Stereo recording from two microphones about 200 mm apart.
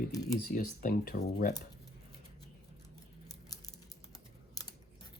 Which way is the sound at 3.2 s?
20° left (ahead or behind).